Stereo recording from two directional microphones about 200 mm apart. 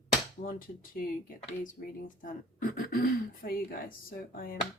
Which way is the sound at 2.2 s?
45° left (ahead or behind).